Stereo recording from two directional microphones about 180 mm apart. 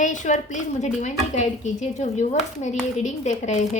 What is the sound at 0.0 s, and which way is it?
A woman's voice, 45° left (ahead or behind).